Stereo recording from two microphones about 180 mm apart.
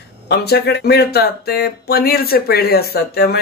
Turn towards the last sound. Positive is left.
turn(degrees=60)  # may be behind; listen again after turning